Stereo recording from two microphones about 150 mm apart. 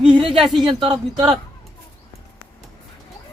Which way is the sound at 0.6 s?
35° right (ahead or behind).